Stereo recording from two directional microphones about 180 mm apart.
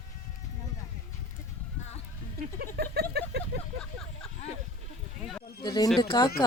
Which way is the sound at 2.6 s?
60° right (ahead or behind).